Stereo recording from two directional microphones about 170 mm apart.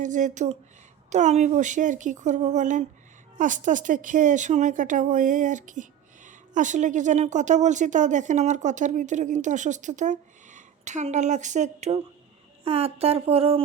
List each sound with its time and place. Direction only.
0.0 s speech: 50° right (ahead or behind)